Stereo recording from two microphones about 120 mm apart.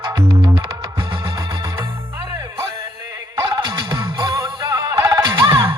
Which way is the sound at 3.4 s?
35° right (ahead or behind).